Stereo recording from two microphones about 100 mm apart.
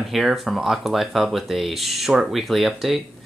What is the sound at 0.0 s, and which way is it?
Speech, centre (ahead or behind).